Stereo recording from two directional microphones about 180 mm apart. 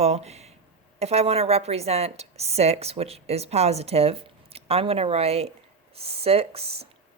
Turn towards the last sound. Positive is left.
turn(degrees=-35)  # may be behind; listen again after turning